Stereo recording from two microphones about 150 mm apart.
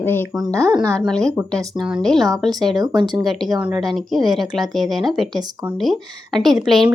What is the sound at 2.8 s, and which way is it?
Speech, 30° right (ahead or behind).